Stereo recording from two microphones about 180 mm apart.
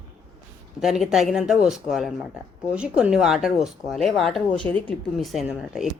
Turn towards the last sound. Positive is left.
turn(degrees=0)  # may be behind; listen again after turning